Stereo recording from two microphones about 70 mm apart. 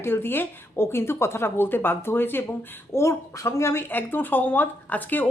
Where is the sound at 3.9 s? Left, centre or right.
Left.